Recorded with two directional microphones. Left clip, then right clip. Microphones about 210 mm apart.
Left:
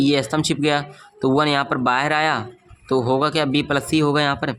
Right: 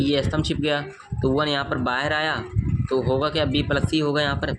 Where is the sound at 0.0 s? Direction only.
30° left (ahead or behind).